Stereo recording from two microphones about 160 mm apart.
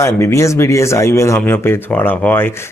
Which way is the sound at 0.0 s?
15° left (ahead or behind).